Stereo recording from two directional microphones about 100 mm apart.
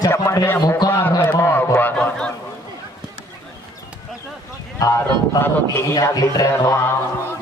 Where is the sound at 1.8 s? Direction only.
15° left (ahead or behind).